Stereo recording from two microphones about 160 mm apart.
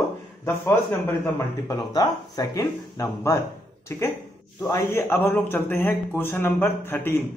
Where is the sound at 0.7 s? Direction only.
15° left (ahead or behind).